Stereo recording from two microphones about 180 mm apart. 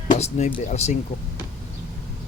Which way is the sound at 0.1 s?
40° left (ahead or behind).